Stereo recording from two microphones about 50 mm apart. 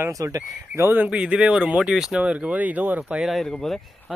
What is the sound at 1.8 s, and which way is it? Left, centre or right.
Speech, centre.